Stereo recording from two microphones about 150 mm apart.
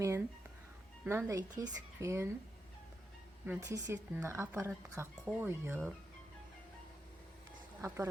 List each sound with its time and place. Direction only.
1.0 s speech: 20° right (ahead or behind)
3.4 s speech: 15° right (ahead or behind)
7.8 s speech: 15° right (ahead or behind)